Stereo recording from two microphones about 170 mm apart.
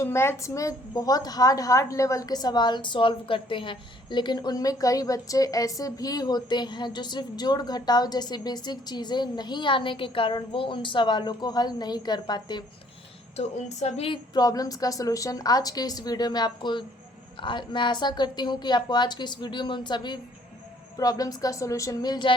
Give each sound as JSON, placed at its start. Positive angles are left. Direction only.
{"t": 0.0, "sound": "a woman's voice", "side_deg": 15}
{"t": 13.3, "sound": "a woman's voice", "side_deg": 40}